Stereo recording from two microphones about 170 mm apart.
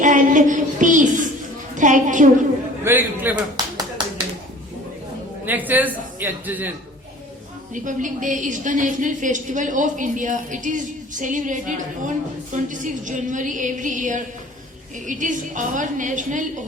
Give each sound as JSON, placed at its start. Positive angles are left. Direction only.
{"t": 0.0, "sound": "a sound", "side_deg": -50}
{"t": 1.7, "sound": "a woman's voice", "side_deg": -50}
{"t": 2.8, "sound": "a man's voice", "side_deg": -10}
{"t": 3.6, "sound": "clapping", "side_deg": -25}
{"t": 5.5, "sound": "a man's voice", "side_deg": -10}
{"t": 7.7, "sound": "a woman's voice", "side_deg": -50}